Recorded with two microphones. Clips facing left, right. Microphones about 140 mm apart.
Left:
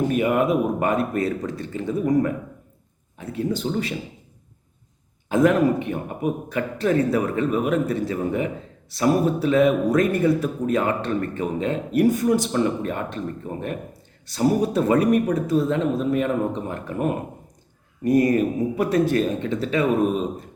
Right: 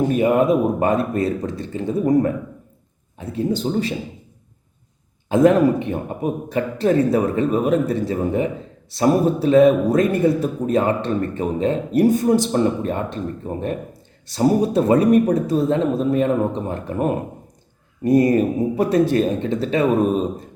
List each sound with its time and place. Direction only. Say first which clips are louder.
0.1 s a man's voice: right 4 dB; 35° right (ahead or behind)
5.3 s a man's voice: right 4 dB; 30° right (ahead or behind)